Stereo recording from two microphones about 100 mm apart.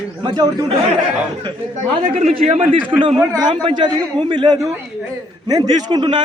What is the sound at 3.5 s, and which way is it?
A man's voice, 55° right (ahead or behind).